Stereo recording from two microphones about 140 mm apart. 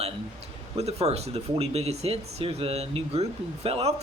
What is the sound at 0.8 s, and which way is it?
Speech, 50° right (ahead or behind).